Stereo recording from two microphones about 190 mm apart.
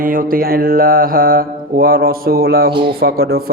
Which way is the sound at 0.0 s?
50° right (ahead or behind).